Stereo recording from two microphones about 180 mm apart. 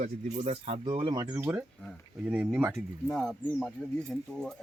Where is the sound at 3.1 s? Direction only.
5° left (ahead or behind).